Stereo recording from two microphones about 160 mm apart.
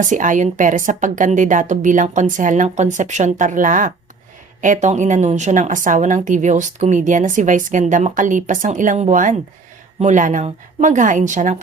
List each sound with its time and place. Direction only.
0.0 s a woman's voice: 55° right (ahead or behind)